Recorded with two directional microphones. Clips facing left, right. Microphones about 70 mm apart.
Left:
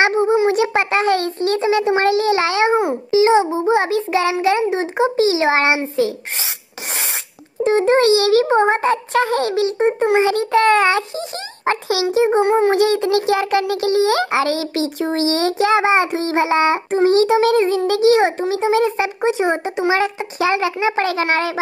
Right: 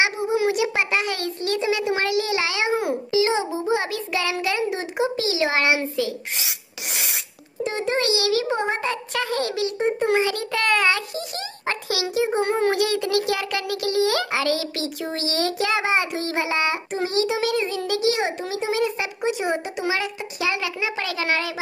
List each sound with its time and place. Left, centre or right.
0.0 s a child's voice: left
2.7 s a child's voice: left
7.6 s a child's voice: left